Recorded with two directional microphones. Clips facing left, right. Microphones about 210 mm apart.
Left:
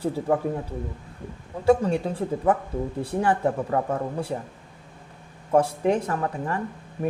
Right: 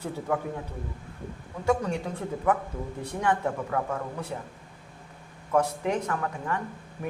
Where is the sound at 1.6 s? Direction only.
30° left (ahead or behind).